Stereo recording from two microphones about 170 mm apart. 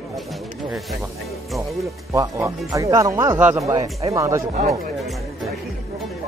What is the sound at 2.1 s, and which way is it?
Speech, 20° right (ahead or behind).